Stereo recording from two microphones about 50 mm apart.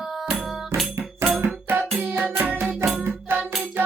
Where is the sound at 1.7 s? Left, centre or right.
Right.